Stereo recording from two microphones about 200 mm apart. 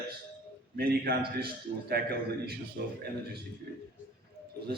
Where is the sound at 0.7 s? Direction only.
50° right (ahead or behind).